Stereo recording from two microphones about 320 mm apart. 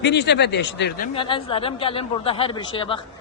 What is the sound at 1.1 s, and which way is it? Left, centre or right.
A man's voice, centre.